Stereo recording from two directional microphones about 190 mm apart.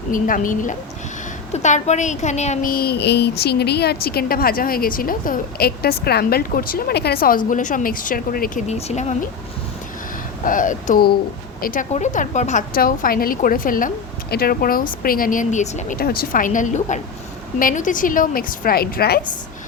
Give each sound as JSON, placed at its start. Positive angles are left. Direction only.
{"t": 0.1, "sound": "a woman's voice", "side_deg": 45}
{"t": 8.6, "sound": "speech", "side_deg": 35}
{"t": 10.4, "sound": "a woman's voice", "side_deg": 45}
{"t": 16.0, "sound": "a woman's voice", "side_deg": 50}